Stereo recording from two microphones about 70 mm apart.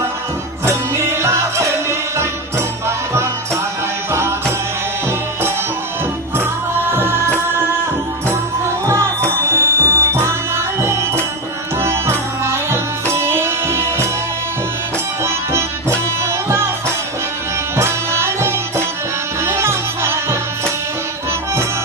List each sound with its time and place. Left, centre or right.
0.6 s music: right
4.1 s music: right
6.9 s music: right
8.3 s music: right
15.2 s music: right
17.7 s music: right